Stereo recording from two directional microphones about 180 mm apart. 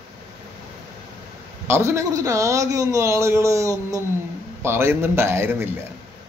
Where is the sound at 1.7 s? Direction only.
15° right (ahead or behind).